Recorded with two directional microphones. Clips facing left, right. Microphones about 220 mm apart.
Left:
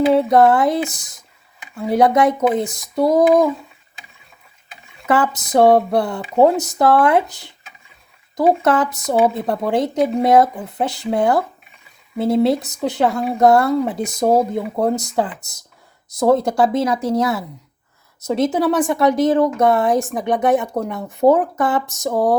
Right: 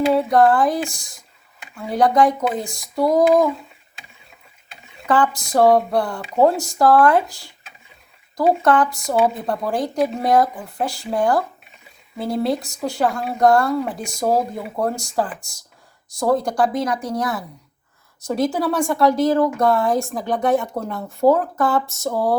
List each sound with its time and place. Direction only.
0.1 s a woman's voice: 25° left (ahead or behind)
5.3 s a woman's voice: 20° left (ahead or behind)